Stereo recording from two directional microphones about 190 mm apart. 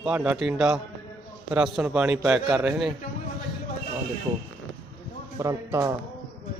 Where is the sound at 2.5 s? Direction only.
Centre (ahead or behind).